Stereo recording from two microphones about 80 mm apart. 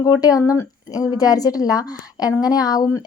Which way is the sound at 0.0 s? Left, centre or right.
Left.